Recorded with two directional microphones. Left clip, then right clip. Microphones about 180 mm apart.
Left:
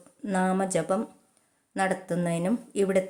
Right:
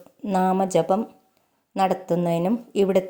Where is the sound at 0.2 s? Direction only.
20° right (ahead or behind).